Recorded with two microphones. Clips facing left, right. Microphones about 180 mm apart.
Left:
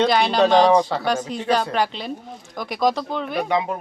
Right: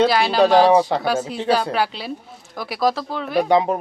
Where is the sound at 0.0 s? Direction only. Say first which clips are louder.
Right 1 dB; 5° right (ahead or behind).